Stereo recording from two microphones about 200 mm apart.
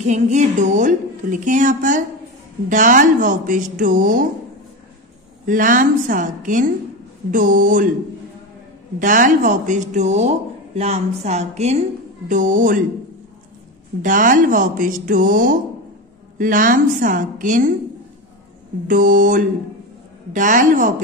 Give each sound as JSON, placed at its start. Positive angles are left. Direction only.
{"t": 0.0, "sound": "speech", "side_deg": -35}
{"t": 5.5, "sound": "speech", "side_deg": -40}
{"t": 9.0, "sound": "speech", "side_deg": -40}
{"t": 14.0, "sound": "speech", "side_deg": -40}
{"t": 18.9, "sound": "a sound", "side_deg": -45}
{"t": 20.3, "sound": "speech", "side_deg": -40}